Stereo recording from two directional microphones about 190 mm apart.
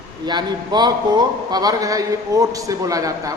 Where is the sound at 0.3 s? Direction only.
20° right (ahead or behind).